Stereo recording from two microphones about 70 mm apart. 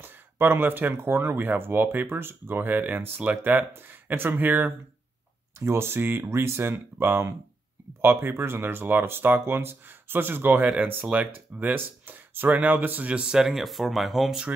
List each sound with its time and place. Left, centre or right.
0.0 s speech: right
5.6 s speech: right; by 14.4 s centre